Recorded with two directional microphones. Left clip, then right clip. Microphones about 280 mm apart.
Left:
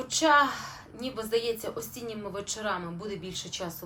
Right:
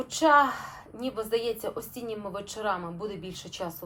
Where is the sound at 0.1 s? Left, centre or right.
Centre.